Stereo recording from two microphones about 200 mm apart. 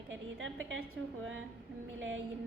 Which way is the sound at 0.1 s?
70° right (ahead or behind).